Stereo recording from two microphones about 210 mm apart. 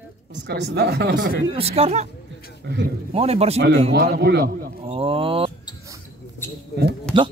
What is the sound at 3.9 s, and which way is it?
Speech, 50° right (ahead or behind).